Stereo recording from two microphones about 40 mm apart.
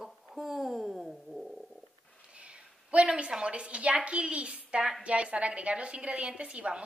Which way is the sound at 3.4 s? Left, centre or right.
Right.